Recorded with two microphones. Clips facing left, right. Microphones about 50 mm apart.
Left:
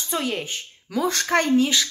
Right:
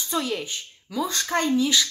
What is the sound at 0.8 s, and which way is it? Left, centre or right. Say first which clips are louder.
Speech: left 4 dB; left.